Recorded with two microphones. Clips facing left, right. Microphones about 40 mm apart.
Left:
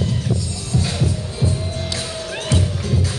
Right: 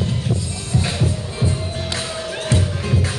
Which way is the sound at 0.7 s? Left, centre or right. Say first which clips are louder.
Even; right.